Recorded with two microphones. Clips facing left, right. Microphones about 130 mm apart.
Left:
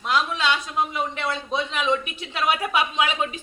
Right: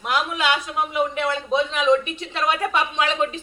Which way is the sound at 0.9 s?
Centre (ahead or behind).